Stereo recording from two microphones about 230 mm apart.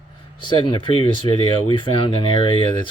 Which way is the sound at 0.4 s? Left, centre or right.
Left.